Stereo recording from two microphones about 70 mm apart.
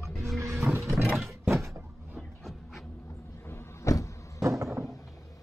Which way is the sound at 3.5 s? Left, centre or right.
Left.